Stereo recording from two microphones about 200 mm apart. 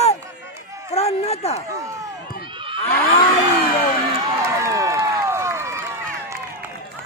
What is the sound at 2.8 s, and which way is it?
Moo, 50° left (ahead or behind).